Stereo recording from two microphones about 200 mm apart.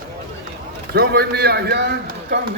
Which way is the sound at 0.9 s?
50° right (ahead or behind).